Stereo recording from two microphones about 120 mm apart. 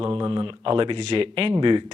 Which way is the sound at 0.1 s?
35° right (ahead or behind).